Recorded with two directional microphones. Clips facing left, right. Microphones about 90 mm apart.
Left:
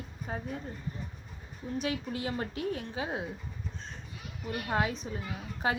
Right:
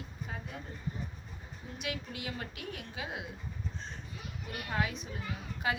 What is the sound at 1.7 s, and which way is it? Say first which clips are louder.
A woman's voice: left 7 dB; 35° left (ahead or behind).